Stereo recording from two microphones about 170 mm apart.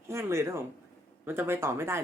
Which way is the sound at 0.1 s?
15° right (ahead or behind).